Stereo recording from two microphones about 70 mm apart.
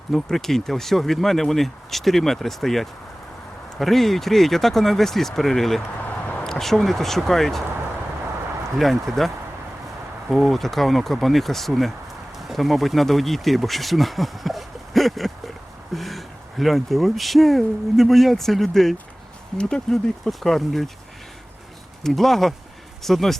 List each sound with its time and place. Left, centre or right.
0.1 s speech: centre
6.0 s a sound: left
6.4 s speech: centre
8.8 s speech: centre
22.0 s speech: centre